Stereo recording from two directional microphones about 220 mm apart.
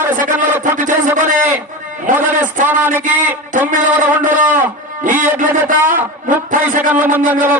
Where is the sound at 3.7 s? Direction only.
35° right (ahead or behind).